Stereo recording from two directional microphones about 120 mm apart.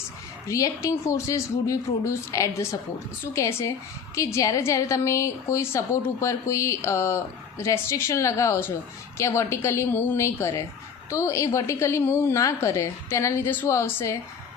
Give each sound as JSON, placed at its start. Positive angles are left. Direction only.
{"t": 0.4, "sound": "speech", "side_deg": 25}